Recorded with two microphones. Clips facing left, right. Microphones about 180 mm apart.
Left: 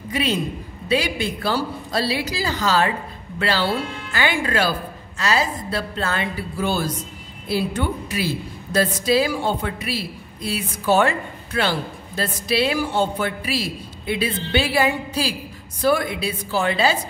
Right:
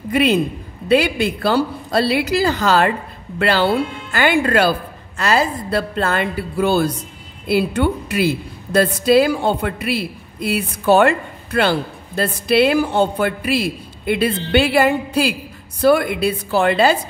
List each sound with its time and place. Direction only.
0.1 s a man's voice: 55° right (ahead or behind)